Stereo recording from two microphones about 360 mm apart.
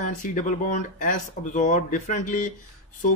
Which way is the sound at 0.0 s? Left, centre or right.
Left.